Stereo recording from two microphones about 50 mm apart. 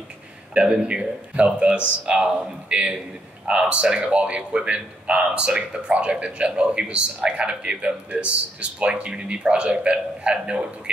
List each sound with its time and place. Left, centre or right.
0.6 s a man's voice: right